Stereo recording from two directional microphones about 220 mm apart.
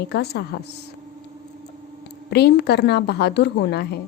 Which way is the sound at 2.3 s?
50° left (ahead or behind).